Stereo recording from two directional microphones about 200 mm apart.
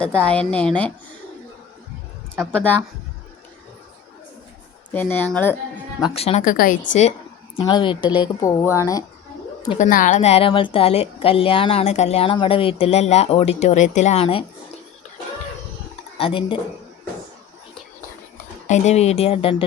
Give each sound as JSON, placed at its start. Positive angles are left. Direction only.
{"t": 0.0, "sound": "a woman's voice", "side_deg": 5}
{"t": 2.4, "sound": "a woman's voice", "side_deg": 5}
{"t": 4.9, "sound": "speech", "side_deg": 10}
{"t": 6.0, "sound": "speech", "side_deg": 30}
{"t": 7.5, "sound": "a woman's voice", "side_deg": 25}
{"t": 9.7, "sound": "a woman's voice", "side_deg": 40}
{"t": 16.1, "sound": "speech", "side_deg": 25}
{"t": 18.7, "sound": "a woman's voice", "side_deg": 35}